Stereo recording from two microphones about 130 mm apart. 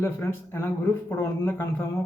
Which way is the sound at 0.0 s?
20° left (ahead or behind).